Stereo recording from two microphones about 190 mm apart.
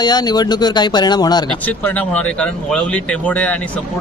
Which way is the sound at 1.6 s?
10° left (ahead or behind).